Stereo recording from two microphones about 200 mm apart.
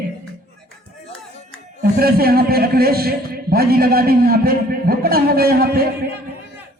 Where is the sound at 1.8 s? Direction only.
50° right (ahead or behind).